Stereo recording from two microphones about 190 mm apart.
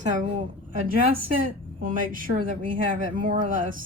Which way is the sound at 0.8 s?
50° right (ahead or behind).